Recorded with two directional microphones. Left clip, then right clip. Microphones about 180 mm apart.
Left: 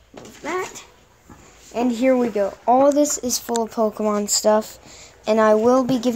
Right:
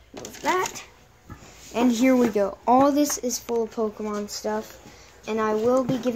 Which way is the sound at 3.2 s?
50° left (ahead or behind).